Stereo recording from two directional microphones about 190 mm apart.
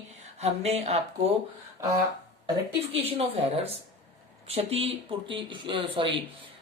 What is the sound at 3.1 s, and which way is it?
Speech, 30° right (ahead or behind).